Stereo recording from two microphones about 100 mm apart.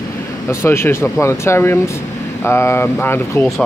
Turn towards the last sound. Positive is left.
turn(degrees=25)  # may be behind; listen again after turning